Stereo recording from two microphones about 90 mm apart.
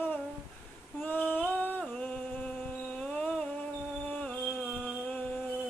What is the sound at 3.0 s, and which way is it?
Music, 10° left (ahead or behind).